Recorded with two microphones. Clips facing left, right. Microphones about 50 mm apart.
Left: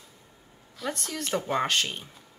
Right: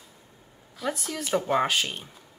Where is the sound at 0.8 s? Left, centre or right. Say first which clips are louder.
Right 2 dB; centre.